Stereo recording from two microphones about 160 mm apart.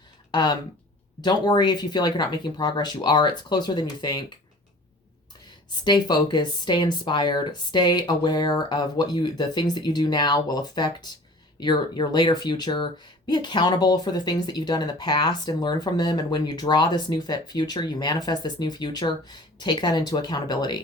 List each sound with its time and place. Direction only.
0.3 s speech: 30° left (ahead or behind)
5.8 s speech: 25° left (ahead or behind)